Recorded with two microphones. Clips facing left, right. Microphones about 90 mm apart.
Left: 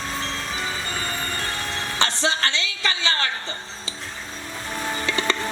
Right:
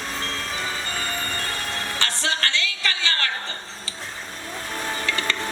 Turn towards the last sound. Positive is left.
turn(degrees=20)  # may be behind; listen again after turning